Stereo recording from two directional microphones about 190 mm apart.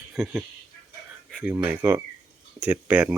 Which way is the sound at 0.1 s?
5° right (ahead or behind).